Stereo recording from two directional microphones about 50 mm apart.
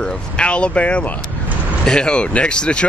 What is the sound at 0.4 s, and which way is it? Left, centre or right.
Speech, left.